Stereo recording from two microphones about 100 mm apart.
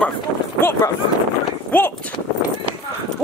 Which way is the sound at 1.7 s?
20° left (ahead or behind).